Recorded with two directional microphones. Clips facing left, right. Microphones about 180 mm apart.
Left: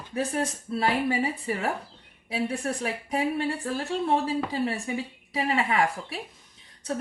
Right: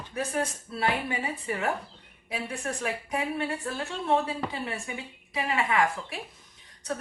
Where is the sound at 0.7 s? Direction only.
35° left (ahead or behind).